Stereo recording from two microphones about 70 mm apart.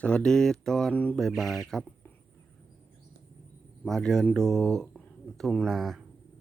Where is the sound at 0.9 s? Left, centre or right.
Left.